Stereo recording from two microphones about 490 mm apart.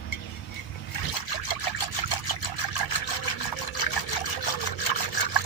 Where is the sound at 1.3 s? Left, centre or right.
Left.